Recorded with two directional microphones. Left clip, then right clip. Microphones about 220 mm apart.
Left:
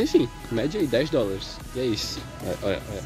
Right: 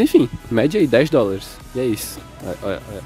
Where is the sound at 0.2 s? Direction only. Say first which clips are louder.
Right 8 dB; 40° right (ahead or behind).